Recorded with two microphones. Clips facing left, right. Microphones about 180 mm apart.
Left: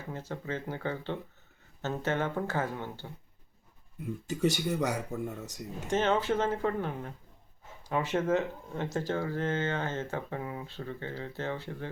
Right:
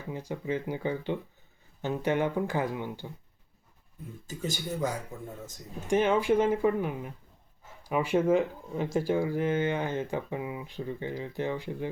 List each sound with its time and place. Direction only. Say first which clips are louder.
0.1 s speech: right 5 dB; 15° right (ahead or behind)
4.3 s speech: left 5 dB; 70° left (ahead or behind)
5.9 s speech: right 4 dB; 10° right (ahead or behind)